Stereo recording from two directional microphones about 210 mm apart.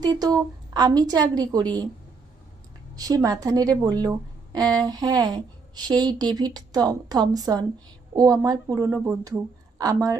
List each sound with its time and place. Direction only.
0.0 s speech: 20° right (ahead or behind)
2.9 s a woman's voice: 15° right (ahead or behind)